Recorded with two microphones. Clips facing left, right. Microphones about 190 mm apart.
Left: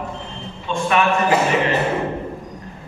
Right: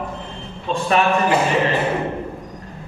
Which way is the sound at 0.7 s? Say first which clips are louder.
Right 1 dB; 35° right (ahead or behind).